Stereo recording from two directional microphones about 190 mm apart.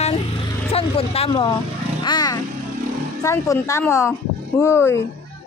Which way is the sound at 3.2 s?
15° left (ahead or behind).